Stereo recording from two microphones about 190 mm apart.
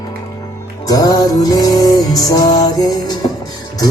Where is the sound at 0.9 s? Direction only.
20° left (ahead or behind).